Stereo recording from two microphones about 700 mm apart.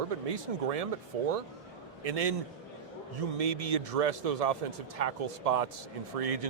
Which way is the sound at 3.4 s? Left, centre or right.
Right.